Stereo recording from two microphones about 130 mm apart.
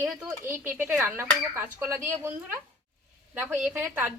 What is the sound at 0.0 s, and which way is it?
A woman's voice, 15° right (ahead or behind).